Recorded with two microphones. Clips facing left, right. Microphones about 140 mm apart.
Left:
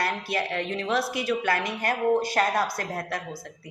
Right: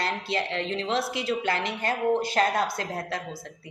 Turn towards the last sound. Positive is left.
turn(degrees=-25)  # may be behind; listen again after turning